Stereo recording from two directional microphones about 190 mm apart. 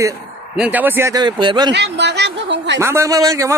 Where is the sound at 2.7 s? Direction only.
15° right (ahead or behind).